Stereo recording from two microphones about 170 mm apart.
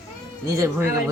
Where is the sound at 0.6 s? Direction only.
15° right (ahead or behind).